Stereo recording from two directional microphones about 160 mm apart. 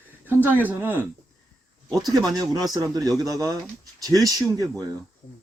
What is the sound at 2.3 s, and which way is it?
Speech, 25° right (ahead or behind).